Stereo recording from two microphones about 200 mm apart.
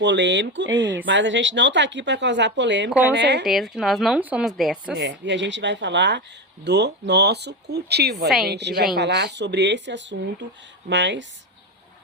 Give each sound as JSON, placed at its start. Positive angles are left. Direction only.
{"t": 0.0, "sound": "speech", "side_deg": -60}
{"t": 3.4, "sound": "a woman's voice", "side_deg": 0}
{"t": 4.9, "sound": "speech", "side_deg": -60}